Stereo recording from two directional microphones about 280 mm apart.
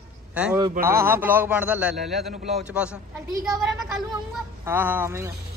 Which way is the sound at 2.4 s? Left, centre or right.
Right.